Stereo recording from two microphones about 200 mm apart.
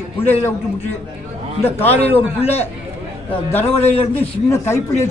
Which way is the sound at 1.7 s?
10° left (ahead or behind).